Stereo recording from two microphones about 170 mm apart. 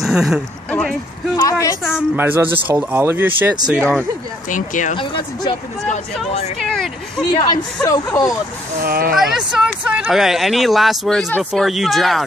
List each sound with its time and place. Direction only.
0.0 s a sound: 5° right (ahead or behind)
1.3 s a sound: 20° left (ahead or behind)
1.8 s speech: 5° right (ahead or behind)
4.5 s speech: 50° left (ahead or behind)
4.9 s speech: 30° left (ahead or behind)
6.6 s speech: centre (ahead or behind)
7.3 s speech: 25° left (ahead or behind)
8.8 s speech: 60° right (ahead or behind)
9.1 s speech: centre (ahead or behind)